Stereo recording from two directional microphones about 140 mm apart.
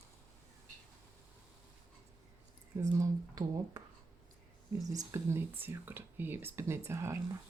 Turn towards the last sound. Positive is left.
turn(degrees=-20)  # may be behind; listen again after turning